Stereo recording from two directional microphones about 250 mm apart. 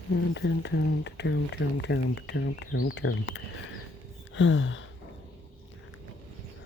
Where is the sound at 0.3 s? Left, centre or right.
Left.